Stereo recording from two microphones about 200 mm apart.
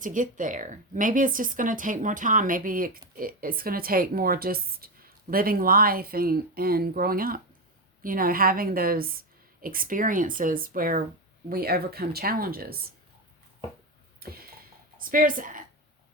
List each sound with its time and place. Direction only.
0.0 s speech: 40° right (ahead or behind)
14.2 s a sound: 50° right (ahead or behind)
14.9 s a woman's voice: 45° right (ahead or behind)